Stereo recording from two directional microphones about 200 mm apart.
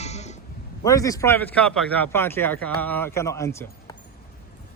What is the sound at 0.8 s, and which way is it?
A man's voice, 15° left (ahead or behind).